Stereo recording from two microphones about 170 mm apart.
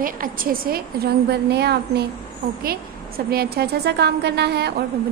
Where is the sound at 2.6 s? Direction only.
60° right (ahead or behind).